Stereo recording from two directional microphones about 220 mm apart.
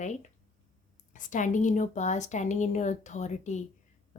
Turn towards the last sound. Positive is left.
turn(degrees=30)  # may be behind; listen again after turning